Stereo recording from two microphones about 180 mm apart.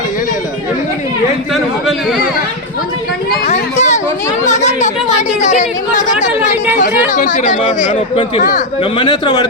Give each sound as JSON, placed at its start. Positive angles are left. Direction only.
{"t": 1.5, "sound": "speech", "side_deg": 0}
{"t": 3.4, "sound": "a sound", "side_deg": 40}
{"t": 5.4, "sound": "chatter", "side_deg": 40}
{"t": 7.1, "sound": "speech", "side_deg": 45}
{"t": 8.8, "sound": "a man's voice", "side_deg": 25}